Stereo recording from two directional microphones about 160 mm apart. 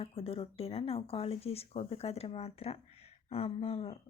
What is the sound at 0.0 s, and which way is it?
Speech, 35° left (ahead or behind).